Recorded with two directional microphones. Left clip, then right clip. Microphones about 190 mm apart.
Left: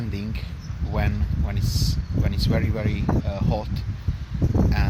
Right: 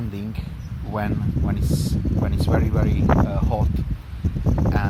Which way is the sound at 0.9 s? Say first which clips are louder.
Right 3 dB; centre (ahead or behind).